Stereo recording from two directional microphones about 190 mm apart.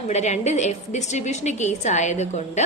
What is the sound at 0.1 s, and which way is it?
A woman's voice, 35° left (ahead or behind).